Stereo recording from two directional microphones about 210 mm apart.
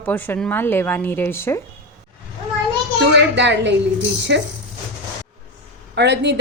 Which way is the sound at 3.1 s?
55° right (ahead or behind).